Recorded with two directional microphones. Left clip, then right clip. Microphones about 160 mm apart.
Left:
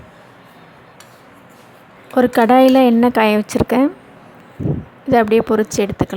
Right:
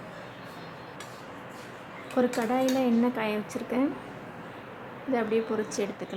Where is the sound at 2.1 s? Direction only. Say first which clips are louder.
Left 15 dB; 50° left (ahead or behind).